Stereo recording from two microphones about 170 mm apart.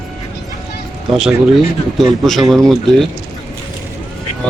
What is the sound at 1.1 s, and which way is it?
Speech, centre (ahead or behind).